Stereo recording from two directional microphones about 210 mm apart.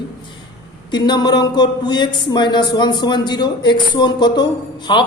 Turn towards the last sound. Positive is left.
turn(degrees=20)  # may be behind; listen again after turning